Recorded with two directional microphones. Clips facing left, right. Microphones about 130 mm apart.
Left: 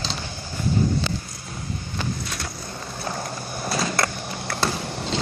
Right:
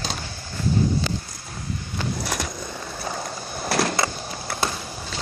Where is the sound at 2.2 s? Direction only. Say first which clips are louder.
Right 5 dB; 90° right.